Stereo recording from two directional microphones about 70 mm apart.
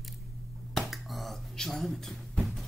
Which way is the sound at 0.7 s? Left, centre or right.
Centre.